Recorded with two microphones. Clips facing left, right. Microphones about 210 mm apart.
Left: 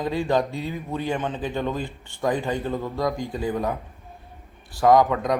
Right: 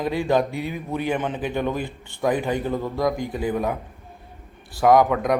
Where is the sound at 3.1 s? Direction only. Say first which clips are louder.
Right 2 dB; 20° right (ahead or behind).